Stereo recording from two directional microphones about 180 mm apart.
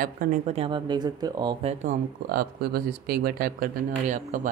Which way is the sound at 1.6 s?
45° right (ahead or behind).